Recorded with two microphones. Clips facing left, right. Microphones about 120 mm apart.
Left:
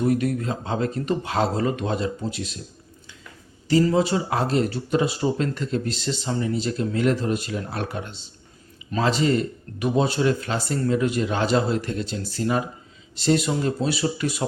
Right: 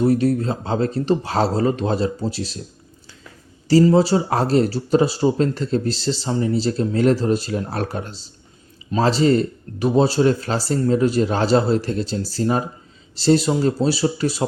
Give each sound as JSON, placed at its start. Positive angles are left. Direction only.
{"t": 0.0, "sound": "speech", "side_deg": -30}
{"t": 3.9, "sound": "speech", "side_deg": -35}